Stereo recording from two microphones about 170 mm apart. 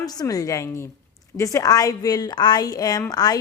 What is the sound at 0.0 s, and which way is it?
A woman's voice, 20° left (ahead or behind).